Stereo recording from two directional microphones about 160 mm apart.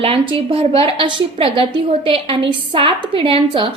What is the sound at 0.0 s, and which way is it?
A woman's voice, 35° right (ahead or behind).